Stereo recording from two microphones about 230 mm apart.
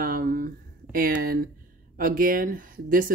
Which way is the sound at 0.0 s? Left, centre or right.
Right.